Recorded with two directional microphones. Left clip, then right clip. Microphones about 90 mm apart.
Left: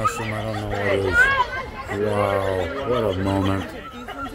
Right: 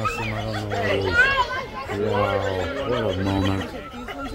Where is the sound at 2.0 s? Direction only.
45° left (ahead or behind).